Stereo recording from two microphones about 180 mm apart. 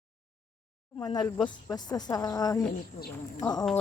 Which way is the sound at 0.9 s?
20° left (ahead or behind).